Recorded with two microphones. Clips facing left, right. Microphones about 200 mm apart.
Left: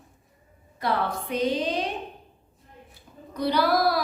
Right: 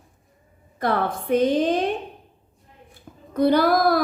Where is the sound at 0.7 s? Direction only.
50° right (ahead or behind).